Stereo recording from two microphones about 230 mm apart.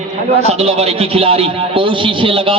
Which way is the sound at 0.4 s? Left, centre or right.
Right.